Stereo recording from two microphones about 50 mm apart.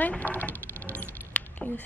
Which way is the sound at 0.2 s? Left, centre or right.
Left.